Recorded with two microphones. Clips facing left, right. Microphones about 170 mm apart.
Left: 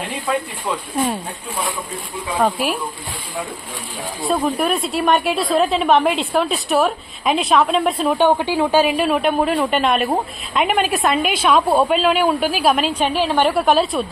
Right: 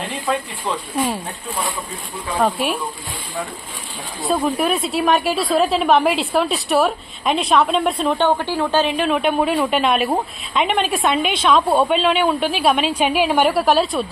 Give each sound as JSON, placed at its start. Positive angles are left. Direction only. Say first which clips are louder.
{"t": 2.4, "sound": "a woman's voice", "louder": "even", "side_deg": 0}
{"t": 4.2, "sound": "a woman's voice", "louder": "even", "side_deg": 0}
{"t": 12.9, "sound": "a woman's voice", "louder": "right 1 dB", "side_deg": -10}